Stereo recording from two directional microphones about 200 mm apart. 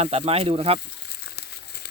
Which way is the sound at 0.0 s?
30° right (ahead or behind).